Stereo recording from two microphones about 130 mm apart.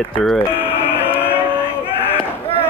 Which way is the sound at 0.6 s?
15° left (ahead or behind).